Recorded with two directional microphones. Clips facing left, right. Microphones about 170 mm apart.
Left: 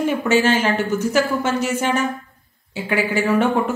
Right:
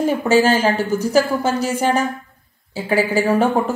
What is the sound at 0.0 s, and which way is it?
Speech, 35° right (ahead or behind).